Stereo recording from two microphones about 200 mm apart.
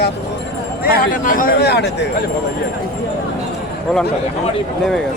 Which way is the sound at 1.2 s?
45° left (ahead or behind).